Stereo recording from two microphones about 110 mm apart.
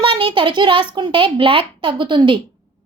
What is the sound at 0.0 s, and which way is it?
A child's voice, 50° right (ahead or behind).